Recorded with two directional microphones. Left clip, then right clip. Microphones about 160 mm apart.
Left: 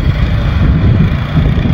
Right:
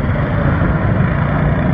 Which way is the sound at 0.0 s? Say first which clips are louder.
Right 2 dB; 35° left (ahead or behind).